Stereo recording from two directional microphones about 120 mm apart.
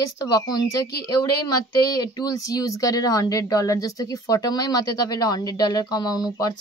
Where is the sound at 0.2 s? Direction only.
35° left (ahead or behind).